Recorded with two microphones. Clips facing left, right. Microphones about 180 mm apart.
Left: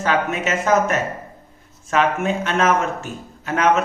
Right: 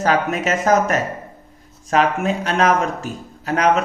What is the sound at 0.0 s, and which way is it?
A man's voice, 40° right (ahead or behind).